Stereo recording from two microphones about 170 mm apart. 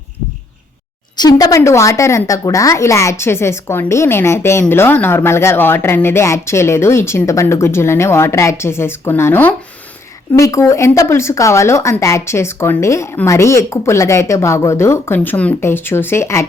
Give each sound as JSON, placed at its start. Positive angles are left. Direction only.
{"t": 1.1, "sound": "speech", "side_deg": 25}